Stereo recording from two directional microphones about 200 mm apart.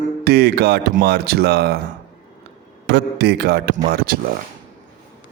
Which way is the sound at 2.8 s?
60° right (ahead or behind).